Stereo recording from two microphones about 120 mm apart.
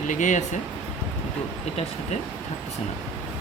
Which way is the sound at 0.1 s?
90° left.